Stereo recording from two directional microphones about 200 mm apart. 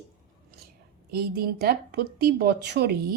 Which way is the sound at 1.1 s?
50° right (ahead or behind).